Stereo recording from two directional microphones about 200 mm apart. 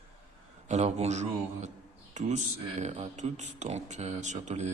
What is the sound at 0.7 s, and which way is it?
Speech, 35° right (ahead or behind).